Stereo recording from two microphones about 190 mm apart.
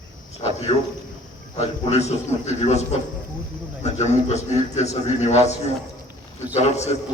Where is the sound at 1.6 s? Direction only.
35° left (ahead or behind).